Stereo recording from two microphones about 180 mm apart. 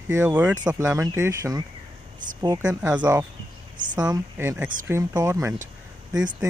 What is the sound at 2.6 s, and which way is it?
Speech, 10° right (ahead or behind).